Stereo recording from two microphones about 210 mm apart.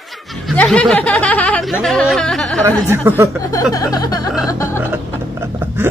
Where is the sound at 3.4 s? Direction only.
15° left (ahead or behind).